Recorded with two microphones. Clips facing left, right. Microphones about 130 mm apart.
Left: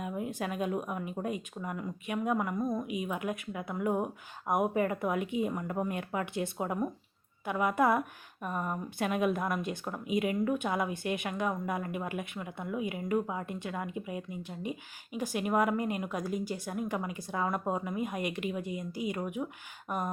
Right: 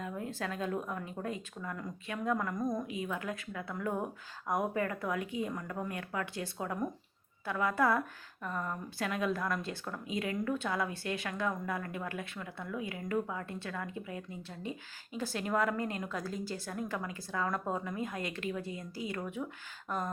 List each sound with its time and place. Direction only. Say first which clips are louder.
0.0 s a woman's voice: left 3 dB; 15° left (ahead or behind)